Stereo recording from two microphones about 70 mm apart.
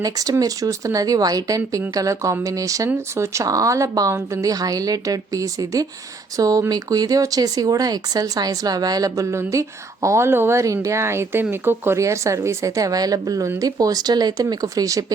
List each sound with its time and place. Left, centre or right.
0.0 s speech: right
9.3 s speech: right
10.6 s speech: right
11.9 s speech: right